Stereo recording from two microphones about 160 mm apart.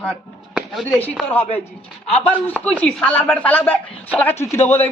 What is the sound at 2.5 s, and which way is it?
A woman's voice, 10° left (ahead or behind).